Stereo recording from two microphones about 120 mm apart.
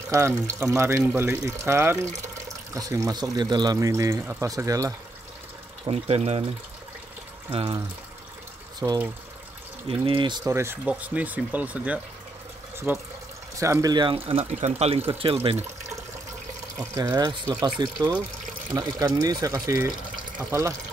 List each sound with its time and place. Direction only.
0.1 s speech: 20° right (ahead or behind)
5.9 s speech: 55° right (ahead or behind)
7.5 s speech: 50° right (ahead or behind)
8.7 s speech: 40° right (ahead or behind)
10.4 s speech: 20° right (ahead or behind)
13.9 s speech: 45° right (ahead or behind)
16.9 s speech: 30° right (ahead or behind)